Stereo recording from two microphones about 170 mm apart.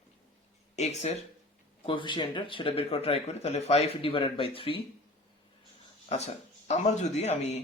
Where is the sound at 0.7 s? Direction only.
40° left (ahead or behind).